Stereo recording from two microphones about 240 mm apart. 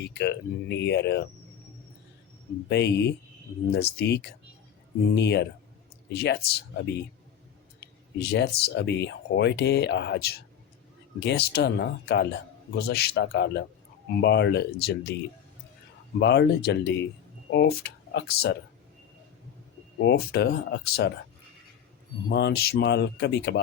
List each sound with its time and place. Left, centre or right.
0.0 s speech: left
2.6 s speech: left
7.8 s a sound: left
8.2 s a man's voice: left
16.1 s speech: left
20.0 s speech: left
22.3 s speech: left